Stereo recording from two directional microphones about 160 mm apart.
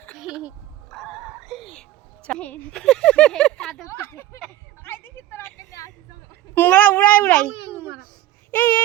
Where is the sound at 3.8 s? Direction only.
15° left (ahead or behind).